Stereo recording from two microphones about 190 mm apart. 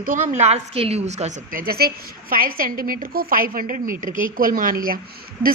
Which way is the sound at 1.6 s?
55° right (ahead or behind).